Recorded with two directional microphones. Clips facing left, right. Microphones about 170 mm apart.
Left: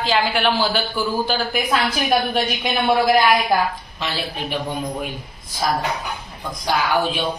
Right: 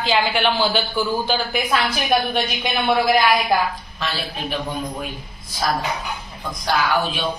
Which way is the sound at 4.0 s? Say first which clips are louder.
Left 1 dB; 15° left (ahead or behind).